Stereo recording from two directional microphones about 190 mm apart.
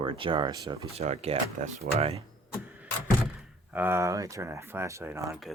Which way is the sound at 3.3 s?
10° right (ahead or behind).